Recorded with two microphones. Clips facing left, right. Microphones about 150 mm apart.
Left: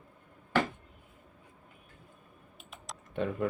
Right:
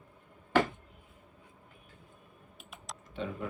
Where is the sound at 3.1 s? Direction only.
55° left (ahead or behind).